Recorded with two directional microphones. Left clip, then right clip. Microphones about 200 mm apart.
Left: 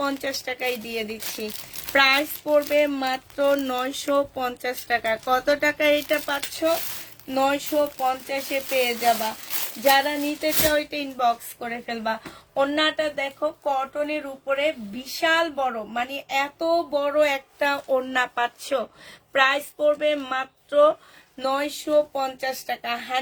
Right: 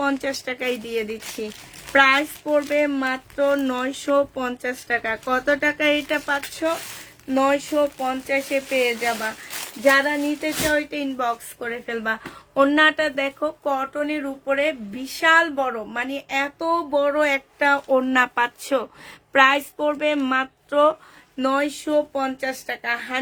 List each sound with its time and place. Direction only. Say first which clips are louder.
0.0 s speech: right 3 dB; 25° right (ahead or behind)